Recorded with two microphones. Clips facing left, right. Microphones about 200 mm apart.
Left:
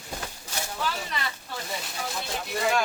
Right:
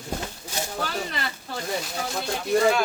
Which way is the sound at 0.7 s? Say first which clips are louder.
Right 1 dB; 45° right (ahead or behind).